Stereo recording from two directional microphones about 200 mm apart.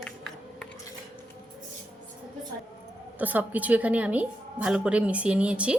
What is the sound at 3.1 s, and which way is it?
A woman's voice, 10° right (ahead or behind).